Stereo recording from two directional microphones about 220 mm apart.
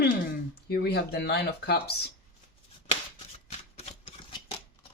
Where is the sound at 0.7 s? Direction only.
45° left (ahead or behind).